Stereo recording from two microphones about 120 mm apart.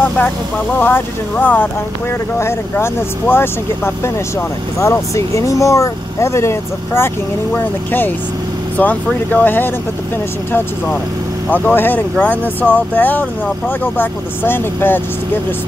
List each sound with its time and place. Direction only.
0.7 s speech: 15° left (ahead or behind)
11.5 s speech: 15° left (ahead or behind)